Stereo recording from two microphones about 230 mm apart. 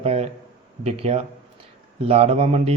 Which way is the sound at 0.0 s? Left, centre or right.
Right.